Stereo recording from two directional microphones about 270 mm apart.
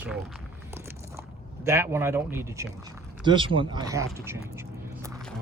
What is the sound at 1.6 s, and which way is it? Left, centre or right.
Speech, centre.